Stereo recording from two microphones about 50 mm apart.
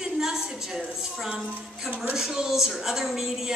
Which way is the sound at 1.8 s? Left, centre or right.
Right.